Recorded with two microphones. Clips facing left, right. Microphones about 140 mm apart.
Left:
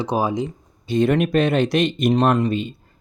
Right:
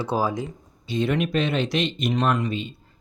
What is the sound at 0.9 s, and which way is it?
Speech, 50° left (ahead or behind).